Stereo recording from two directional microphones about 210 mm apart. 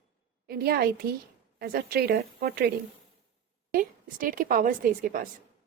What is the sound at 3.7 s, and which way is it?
A woman's voice, 40° right (ahead or behind).